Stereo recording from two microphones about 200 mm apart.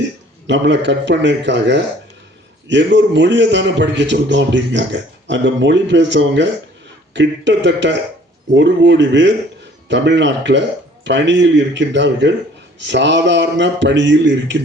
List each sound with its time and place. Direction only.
0.4 s a man's voice: 65° right (ahead or behind)